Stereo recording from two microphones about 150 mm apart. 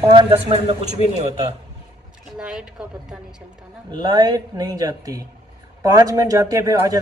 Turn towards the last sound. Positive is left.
turn(degrees=-20)  # may be behind; listen again after turning